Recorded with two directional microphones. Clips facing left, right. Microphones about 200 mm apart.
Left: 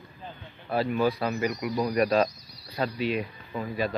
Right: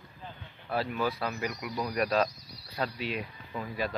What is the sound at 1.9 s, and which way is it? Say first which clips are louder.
Speech: left 4 dB; 5° left (ahead or behind).